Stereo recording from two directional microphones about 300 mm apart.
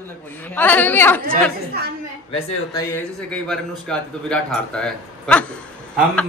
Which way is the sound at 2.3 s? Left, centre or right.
Centre.